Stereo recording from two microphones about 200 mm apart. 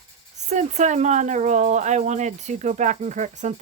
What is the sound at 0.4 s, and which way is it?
Speech, 35° right (ahead or behind).